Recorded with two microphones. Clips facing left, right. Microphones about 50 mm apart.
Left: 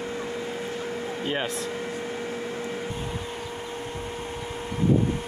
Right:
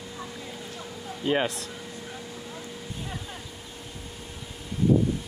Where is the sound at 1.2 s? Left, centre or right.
Centre.